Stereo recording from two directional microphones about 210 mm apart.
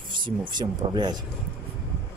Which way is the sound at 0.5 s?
20° right (ahead or behind).